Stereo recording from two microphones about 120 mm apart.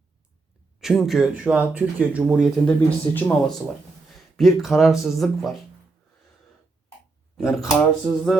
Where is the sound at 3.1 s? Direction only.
30° left (ahead or behind).